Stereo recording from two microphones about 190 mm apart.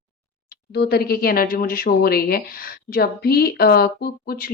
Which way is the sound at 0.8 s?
55° left (ahead or behind).